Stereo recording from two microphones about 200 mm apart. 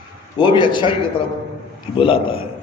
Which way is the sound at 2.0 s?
25° left (ahead or behind).